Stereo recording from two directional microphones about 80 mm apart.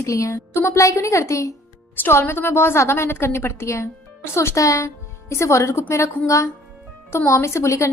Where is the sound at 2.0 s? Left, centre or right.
Left.